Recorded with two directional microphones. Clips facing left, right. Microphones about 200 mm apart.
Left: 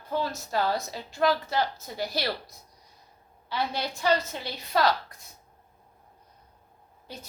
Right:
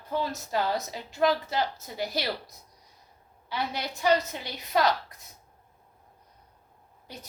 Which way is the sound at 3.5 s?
20° right (ahead or behind).